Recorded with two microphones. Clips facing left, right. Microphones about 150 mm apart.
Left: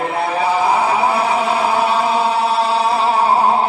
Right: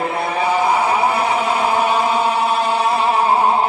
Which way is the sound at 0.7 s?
10° left (ahead or behind).